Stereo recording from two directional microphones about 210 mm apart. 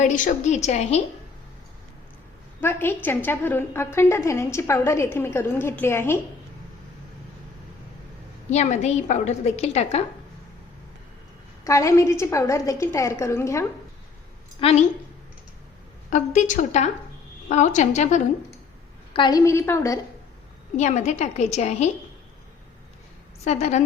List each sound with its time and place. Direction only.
0.0 s a woman's voice: 35° left (ahead or behind)
2.6 s a woman's voice: 10° left (ahead or behind)
8.4 s a woman's voice: 35° left (ahead or behind)
11.6 s a woman's voice: 15° left (ahead or behind)
14.6 s a woman's voice: 30° left (ahead or behind)
16.0 s a woman's voice: 35° left (ahead or behind)
19.1 s a woman's voice: 20° left (ahead or behind)
20.7 s a woman's voice: 35° left (ahead or behind)
23.4 s a woman's voice: 30° left (ahead or behind)